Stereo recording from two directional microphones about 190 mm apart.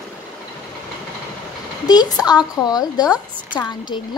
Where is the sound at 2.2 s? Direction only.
20° left (ahead or behind).